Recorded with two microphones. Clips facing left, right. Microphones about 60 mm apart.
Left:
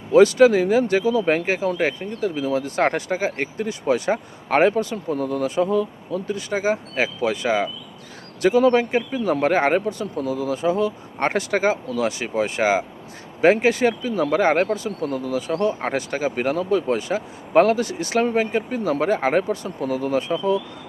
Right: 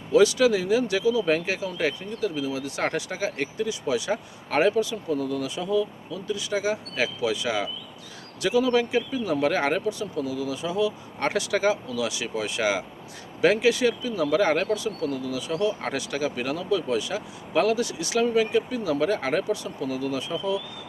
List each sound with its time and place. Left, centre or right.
0.1 s speech: left